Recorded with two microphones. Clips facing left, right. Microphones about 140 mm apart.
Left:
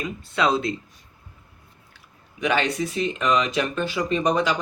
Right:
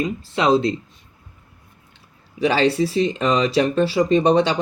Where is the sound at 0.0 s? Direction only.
25° right (ahead or behind).